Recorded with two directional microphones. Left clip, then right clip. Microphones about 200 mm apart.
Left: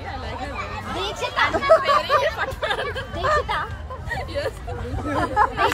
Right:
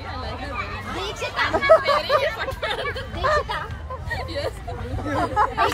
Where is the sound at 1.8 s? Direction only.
5° left (ahead or behind).